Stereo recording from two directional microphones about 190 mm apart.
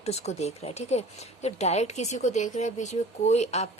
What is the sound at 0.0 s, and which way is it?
Speech, 35° left (ahead or behind).